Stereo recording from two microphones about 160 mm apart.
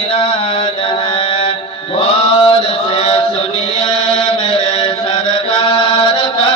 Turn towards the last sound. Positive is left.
turn(degrees=40)  # may be behind; listen again after turning